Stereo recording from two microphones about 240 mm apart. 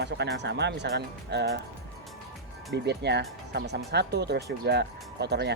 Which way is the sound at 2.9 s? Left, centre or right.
Right.